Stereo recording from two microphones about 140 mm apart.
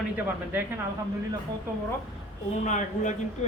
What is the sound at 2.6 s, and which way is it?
Speech, 60° left (ahead or behind).